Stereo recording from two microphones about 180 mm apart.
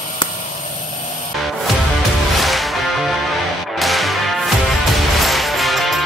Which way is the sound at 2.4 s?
Centre (ahead or behind).